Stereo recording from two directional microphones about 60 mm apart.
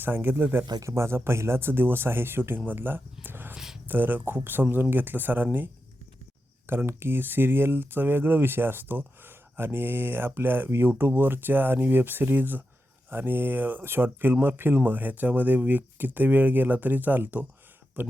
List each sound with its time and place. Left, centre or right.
0.0 s speech: right
0.8 s speech: right
6.7 s speech: right